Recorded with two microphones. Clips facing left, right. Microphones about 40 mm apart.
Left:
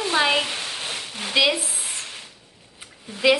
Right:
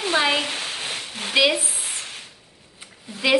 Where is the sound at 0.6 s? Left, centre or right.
Centre.